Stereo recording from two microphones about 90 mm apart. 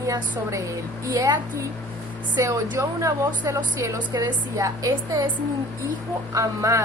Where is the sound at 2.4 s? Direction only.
35° right (ahead or behind).